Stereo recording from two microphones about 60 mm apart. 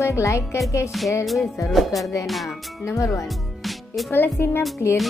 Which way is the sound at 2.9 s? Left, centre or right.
Left.